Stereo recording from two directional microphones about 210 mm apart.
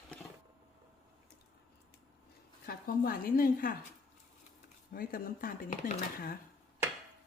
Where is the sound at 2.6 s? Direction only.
45° left (ahead or behind).